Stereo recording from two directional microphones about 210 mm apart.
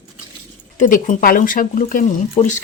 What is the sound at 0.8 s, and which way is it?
Speech, 40° left (ahead or behind).